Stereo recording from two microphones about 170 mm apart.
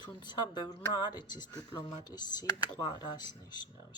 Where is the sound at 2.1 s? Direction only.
25° left (ahead or behind).